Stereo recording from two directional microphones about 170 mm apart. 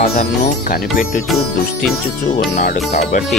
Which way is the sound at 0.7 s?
55° left (ahead or behind).